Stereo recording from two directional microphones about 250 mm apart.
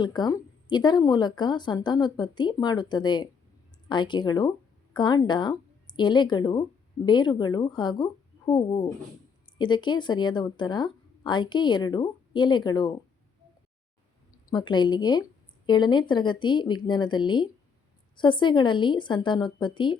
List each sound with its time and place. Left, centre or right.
0.0 s a woman's voice: centre
14.5 s a woman's voice: centre